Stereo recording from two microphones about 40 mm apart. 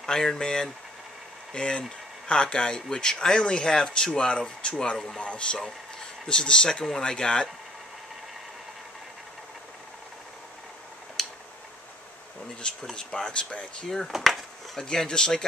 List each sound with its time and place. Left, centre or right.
0.0 s speech: centre
4.9 s speech: centre
5.2 s speech: left
5.6 s a sound: centre
6.2 s speech: left
11.2 s tick-tock: centre
12.6 s speech: centre
13.8 s speech: centre